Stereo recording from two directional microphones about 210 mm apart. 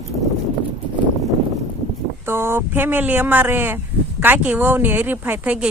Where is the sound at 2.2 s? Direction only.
10° right (ahead or behind).